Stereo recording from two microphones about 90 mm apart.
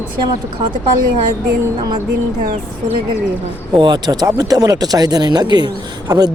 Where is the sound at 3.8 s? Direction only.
55° right (ahead or behind).